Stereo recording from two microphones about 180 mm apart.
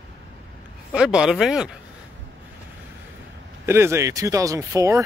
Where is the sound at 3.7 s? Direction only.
15° right (ahead or behind).